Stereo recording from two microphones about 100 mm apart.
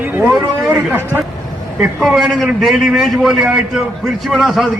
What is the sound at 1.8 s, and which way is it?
A man's voice, 5° right (ahead or behind).